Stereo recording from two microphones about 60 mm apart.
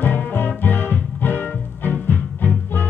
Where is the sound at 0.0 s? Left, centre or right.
Left.